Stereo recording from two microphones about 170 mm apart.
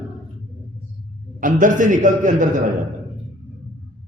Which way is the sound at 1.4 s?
50° right (ahead or behind).